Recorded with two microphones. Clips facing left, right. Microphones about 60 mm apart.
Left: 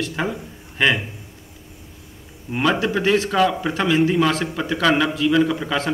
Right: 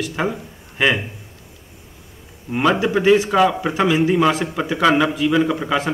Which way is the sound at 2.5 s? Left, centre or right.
Centre.